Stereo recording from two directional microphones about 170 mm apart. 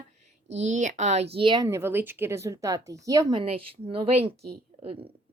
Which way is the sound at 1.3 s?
25° right (ahead or behind).